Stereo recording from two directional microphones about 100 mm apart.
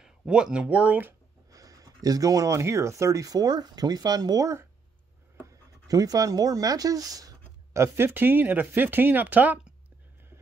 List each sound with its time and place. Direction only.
0.0 s speech: 5° right (ahead or behind)
1.5 s speech: 35° right (ahead or behind); by 9.8 s 15° right (ahead or behind)